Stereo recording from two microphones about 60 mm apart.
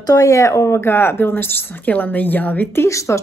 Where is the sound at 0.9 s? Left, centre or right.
Left.